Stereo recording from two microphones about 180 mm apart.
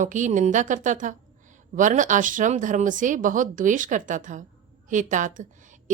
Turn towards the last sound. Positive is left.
turn(degrees=-45)  # may be behind; listen again after turning